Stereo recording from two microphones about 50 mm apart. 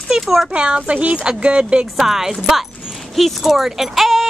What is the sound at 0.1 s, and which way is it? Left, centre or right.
Speech, centre.